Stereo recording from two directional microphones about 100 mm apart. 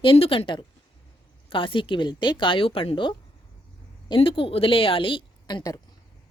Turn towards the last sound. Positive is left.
turn(degrees=55)  # may be behind; listen again after turning